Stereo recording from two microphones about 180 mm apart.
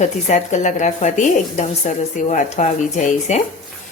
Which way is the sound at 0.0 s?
40° left (ahead or behind).